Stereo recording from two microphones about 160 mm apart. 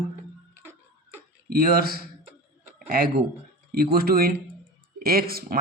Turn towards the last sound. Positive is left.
turn(degrees=-70)  # may be behind; listen again after turning